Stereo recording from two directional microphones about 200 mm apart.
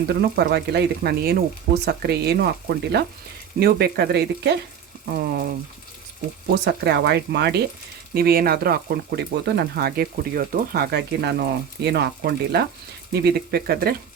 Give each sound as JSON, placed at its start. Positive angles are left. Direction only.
{"t": 0.1, "sound": "speech", "side_deg": -55}